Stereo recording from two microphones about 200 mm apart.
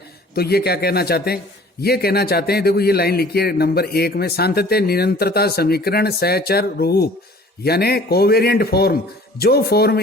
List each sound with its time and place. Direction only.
0.3 s a man's voice: 50° left (ahead or behind)